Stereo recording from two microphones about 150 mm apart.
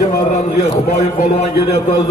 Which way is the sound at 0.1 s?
55° left (ahead or behind).